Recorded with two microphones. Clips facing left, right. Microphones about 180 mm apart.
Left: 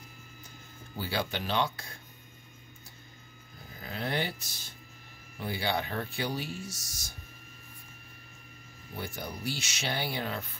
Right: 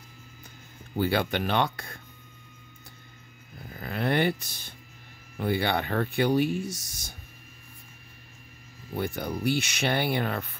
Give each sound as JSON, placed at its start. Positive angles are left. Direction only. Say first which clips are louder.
{"t": 0.9, "sound": "speech", "louder": "right 8 dB", "side_deg": -55}
{"t": 3.8, "sound": "speech", "louder": "right 8 dB", "side_deg": -60}
{"t": 8.9, "sound": "speech", "louder": "right 8 dB", "side_deg": -60}